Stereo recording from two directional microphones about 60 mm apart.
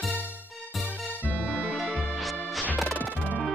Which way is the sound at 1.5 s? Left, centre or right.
Centre.